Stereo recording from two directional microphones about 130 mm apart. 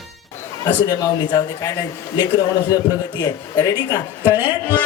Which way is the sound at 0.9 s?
30° left (ahead or behind).